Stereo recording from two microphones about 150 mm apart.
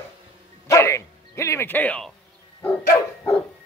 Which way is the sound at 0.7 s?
20° left (ahead or behind).